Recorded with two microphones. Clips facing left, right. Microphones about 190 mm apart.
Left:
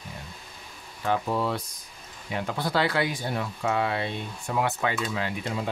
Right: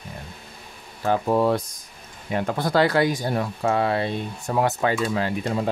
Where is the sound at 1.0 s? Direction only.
45° right (ahead or behind).